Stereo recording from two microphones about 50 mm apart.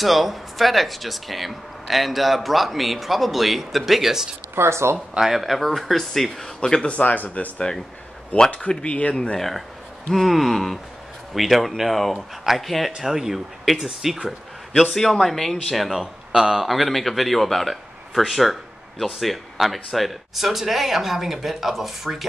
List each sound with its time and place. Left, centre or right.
0.0 s speech: centre
4.6 s speech: right
5.1 s speech: centre
6.9 s speech: left
10.1 s speech: centre